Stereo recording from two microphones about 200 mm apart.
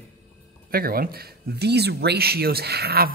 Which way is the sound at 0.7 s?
50° right (ahead or behind).